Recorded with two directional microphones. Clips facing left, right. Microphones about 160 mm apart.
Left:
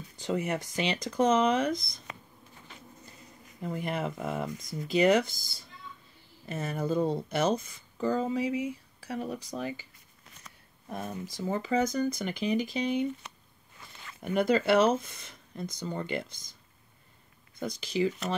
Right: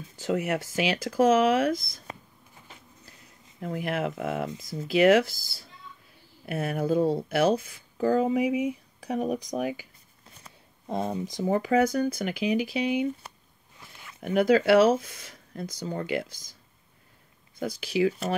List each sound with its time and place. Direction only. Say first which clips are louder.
0.4 s speech: right 3 dB; 5° right (ahead or behind)
3.6 s speech: right 3 dB; centre (ahead or behind)
10.4 s a sound: right 6 dB; 30° right (ahead or behind)
11.1 s speech: right 4 dB; 15° right (ahead or behind)
17.6 s speech: right 4 dB; 5° right (ahead or behind)